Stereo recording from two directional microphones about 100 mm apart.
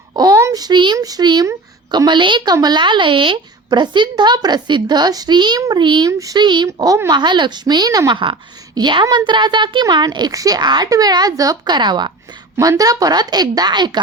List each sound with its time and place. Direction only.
0.3 s a sound: 35° right (ahead or behind)
0.9 s a woman's voice: 40° right (ahead or behind)
5.8 s a woman's voice: 50° right (ahead or behind)
6.1 s a woman's voice: 35° right (ahead or behind)
6.4 s a woman's voice: 50° right (ahead or behind)
6.7 s a woman's voice: 35° right (ahead or behind)
7.1 s a woman's voice: 50° right (ahead or behind)
8.1 s a woman's voice: 55° right (ahead or behind)
12.5 s a woman's voice: 35° right (ahead or behind)